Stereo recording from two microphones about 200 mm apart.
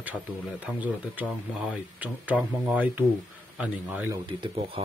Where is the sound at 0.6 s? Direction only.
5° right (ahead or behind).